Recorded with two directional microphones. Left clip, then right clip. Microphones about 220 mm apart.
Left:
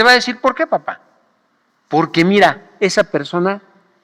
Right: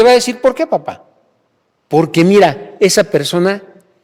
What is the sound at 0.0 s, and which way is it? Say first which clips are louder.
A man's voice: right 2 dB; 45° right (ahead or behind).